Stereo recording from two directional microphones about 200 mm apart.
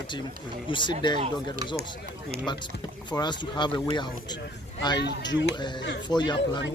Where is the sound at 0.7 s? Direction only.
25° left (ahead or behind).